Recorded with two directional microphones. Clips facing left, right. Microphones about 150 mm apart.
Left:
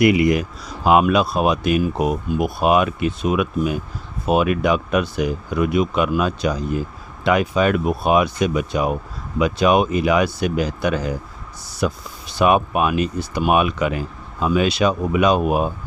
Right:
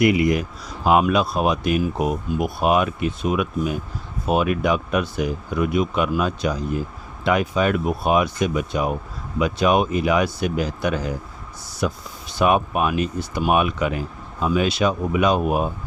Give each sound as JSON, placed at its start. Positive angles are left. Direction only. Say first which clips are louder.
{"t": 0.0, "sound": "speech", "louder": "left 2 dB", "side_deg": 80}
{"t": 14.4, "sound": "speech", "louder": "left 2 dB", "side_deg": 75}